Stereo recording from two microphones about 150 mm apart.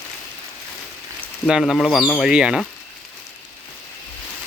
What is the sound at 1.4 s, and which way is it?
Speech, centre (ahead or behind).